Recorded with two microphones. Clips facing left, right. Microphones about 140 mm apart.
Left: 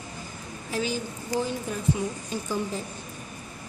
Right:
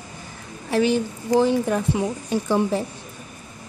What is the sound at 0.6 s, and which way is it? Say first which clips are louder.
A woman's voice: right 10 dB; 70° right (ahead or behind).